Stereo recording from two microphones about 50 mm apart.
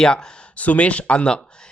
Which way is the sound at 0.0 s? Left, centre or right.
Centre.